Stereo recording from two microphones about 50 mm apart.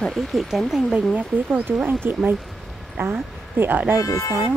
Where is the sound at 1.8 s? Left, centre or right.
Right.